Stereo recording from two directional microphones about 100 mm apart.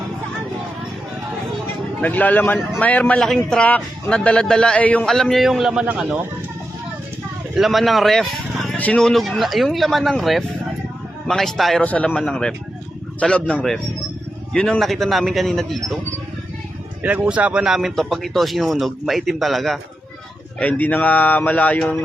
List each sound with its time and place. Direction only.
2.0 s speech: 15° left (ahead or behind)
3.2 s speech: 5° left (ahead or behind)
5.0 s speech: centre (ahead or behind)
7.5 s speech: centre (ahead or behind)
11.8 s speech: 15° left (ahead or behind)
17.0 s speech: 15° right (ahead or behind); by 19.8 s centre (ahead or behind)
20.6 s speech: 15° left (ahead or behind)